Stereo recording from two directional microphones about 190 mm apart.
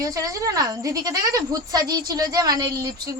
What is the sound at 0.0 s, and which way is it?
Speech, 15° right (ahead or behind).